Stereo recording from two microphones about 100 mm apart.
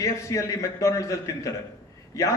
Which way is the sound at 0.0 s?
30° left (ahead or behind).